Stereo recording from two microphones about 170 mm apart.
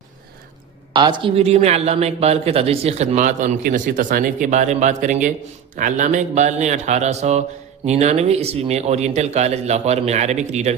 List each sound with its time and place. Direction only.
0.9 s a man's voice: 25° right (ahead or behind); by 10.8 s 40° right (ahead or behind)